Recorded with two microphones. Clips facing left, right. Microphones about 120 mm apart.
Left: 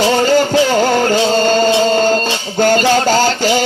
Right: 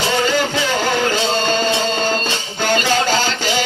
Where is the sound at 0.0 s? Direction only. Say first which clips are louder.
Left 6 dB; 40° left (ahead or behind).